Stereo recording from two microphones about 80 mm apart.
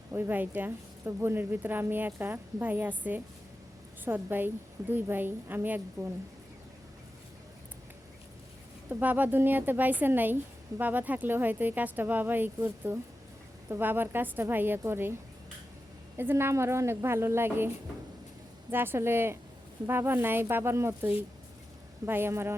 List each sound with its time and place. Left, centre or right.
0.1 s speech: right
8.9 s speech: right
16.1 s a woman's voice: right
18.7 s a woman's voice: right